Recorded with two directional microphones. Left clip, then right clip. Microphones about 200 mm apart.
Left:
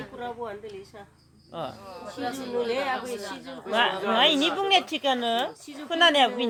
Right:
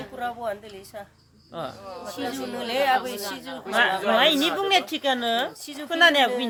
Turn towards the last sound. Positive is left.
turn(degrees=5)  # may be behind; listen again after turning